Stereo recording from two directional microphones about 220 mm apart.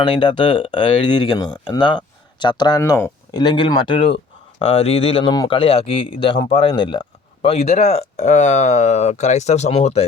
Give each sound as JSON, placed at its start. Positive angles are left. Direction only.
{"t": 0.0, "sound": "speech", "side_deg": 20}